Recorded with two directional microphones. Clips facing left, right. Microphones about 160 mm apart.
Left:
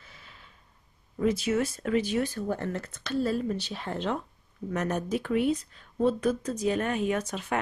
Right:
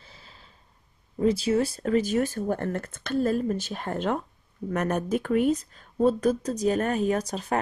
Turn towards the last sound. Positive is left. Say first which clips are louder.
# right 3 dB
turn(degrees=-35)  # may be behind; listen again after turning